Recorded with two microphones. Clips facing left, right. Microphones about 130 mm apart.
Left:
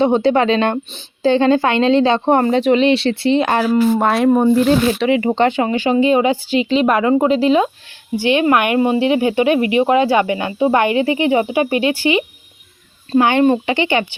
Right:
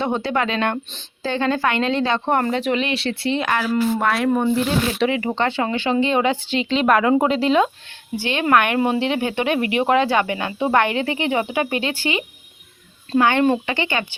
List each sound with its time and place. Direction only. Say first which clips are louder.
0.0 s speech: left 8 dB; 25° left (ahead or behind); by 7.7 s 5° left (ahead or behind)
8.1 s speech: left 4 dB; 15° left (ahead or behind)